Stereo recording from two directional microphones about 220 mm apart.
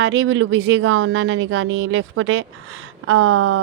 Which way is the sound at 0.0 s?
55° right (ahead or behind).